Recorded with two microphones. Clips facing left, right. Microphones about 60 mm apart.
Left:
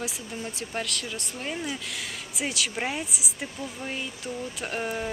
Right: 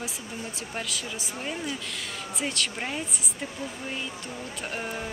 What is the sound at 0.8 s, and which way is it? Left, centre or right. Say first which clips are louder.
A woman's voice: left 1 dB; centre.